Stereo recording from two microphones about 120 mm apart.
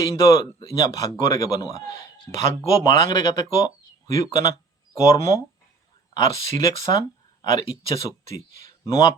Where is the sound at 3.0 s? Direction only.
30° left (ahead or behind).